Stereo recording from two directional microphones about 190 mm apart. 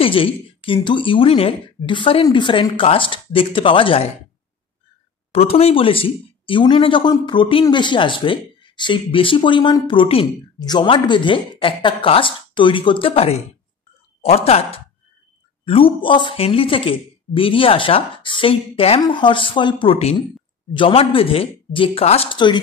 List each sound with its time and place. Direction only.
0.0 s speech: 30° left (ahead or behind)
5.3 s speech: 30° left (ahead or behind)